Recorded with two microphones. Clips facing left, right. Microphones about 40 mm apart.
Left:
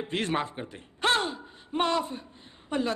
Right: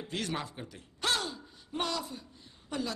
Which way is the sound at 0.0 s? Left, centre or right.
Left.